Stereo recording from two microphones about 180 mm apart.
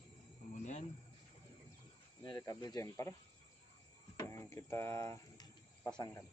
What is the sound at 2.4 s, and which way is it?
Speech, 20° left (ahead or behind).